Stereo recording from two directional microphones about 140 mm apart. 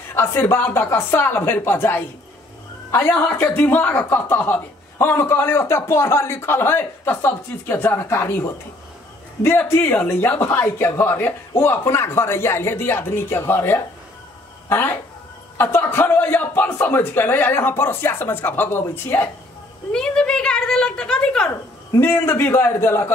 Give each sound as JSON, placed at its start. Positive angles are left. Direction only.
{"t": 0.1, "sound": "speech", "side_deg": 15}
{"t": 19.9, "sound": "a sound", "side_deg": 5}
{"t": 21.9, "sound": "speech", "side_deg": 15}